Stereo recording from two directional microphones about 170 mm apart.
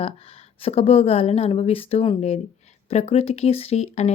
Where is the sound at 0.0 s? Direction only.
35° left (ahead or behind).